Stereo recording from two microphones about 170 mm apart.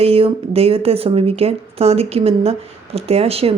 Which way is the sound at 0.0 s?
35° right (ahead or behind).